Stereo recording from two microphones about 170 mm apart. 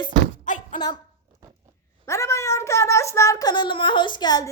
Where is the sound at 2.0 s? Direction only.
15° left (ahead or behind).